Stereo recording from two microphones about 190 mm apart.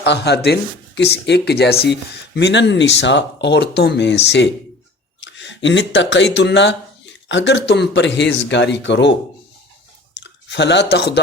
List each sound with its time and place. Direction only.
0.0 s speech: 60° left (ahead or behind)
5.2 s speech: 70° left (ahead or behind)
10.2 s speech: 65° left (ahead or behind)